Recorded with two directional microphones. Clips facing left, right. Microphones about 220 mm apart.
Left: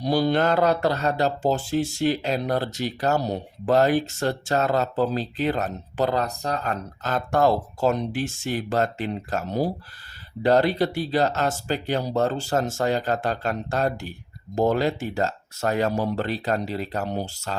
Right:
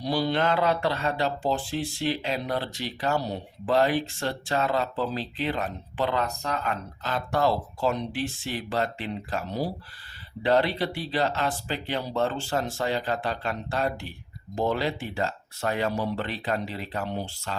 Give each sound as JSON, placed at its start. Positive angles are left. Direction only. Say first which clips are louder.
{"t": 0.0, "sound": "speech", "louder": "left 4 dB", "side_deg": 45}